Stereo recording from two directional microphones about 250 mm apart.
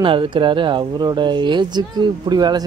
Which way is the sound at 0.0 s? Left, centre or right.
Centre.